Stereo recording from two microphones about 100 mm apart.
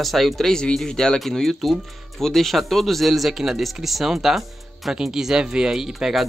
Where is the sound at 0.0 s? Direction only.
Centre (ahead or behind).